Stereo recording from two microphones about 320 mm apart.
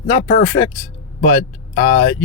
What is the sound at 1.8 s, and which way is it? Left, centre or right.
Speech, centre.